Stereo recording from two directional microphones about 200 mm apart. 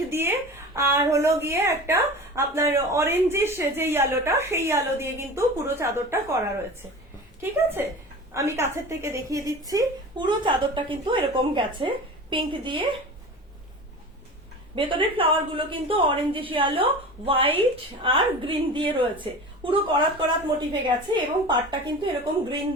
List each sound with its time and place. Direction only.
0.1 s a woman's voice: 10° right (ahead or behind)
7.4 s a woman's voice: 10° right (ahead or behind)
14.8 s a woman's voice: 25° right (ahead or behind)